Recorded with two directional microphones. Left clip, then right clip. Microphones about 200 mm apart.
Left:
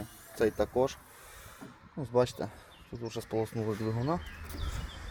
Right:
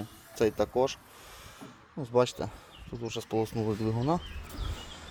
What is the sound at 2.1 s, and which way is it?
Speech, centre (ahead or behind).